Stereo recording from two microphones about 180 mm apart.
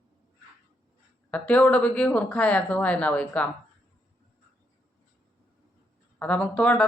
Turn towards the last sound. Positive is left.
turn(degrees=5)  # may be behind; listen again after turning